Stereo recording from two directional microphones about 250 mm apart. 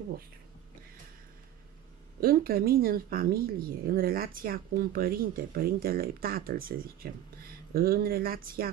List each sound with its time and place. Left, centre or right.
2.1 s speech: right